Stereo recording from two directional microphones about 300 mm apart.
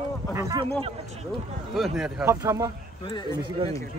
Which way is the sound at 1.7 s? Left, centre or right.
Centre.